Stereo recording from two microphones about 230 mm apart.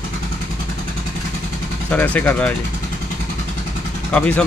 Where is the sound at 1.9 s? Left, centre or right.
Centre.